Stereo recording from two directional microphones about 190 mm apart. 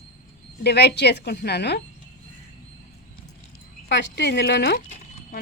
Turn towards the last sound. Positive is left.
turn(degrees=60)  # may be behind; listen again after turning